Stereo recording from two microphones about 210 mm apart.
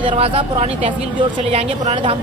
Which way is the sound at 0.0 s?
25° right (ahead or behind).